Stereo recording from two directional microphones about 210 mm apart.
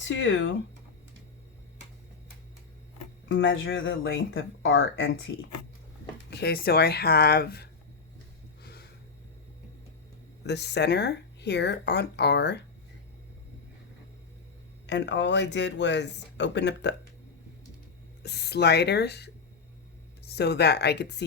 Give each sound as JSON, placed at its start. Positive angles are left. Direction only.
{"t": 0.0, "sound": "speech", "side_deg": 65}
{"t": 3.2, "sound": "speech", "side_deg": 60}
{"t": 6.3, "sound": "speech", "side_deg": 50}
{"t": 8.6, "sound": "a sound", "side_deg": 50}
{"t": 10.4, "sound": "speech", "side_deg": 55}
{"t": 14.8, "sound": "speech", "side_deg": 55}
{"t": 18.2, "sound": "speech", "side_deg": 50}